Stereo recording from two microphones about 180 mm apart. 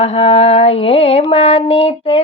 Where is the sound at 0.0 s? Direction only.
35° left (ahead or behind).